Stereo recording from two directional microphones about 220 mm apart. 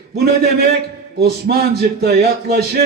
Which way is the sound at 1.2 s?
45° right (ahead or behind).